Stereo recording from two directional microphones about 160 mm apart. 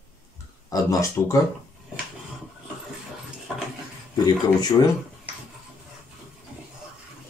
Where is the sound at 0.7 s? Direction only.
20° left (ahead or behind).